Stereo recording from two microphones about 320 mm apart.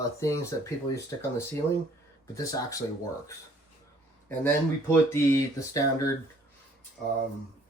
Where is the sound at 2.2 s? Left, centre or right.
Centre.